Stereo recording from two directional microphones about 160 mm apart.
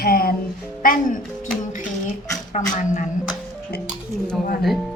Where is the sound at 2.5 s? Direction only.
50° left (ahead or behind).